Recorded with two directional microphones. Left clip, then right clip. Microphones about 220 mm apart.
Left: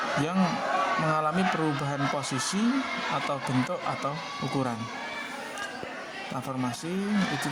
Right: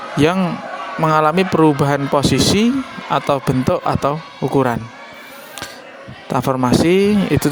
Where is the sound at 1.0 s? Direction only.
40° right (ahead or behind).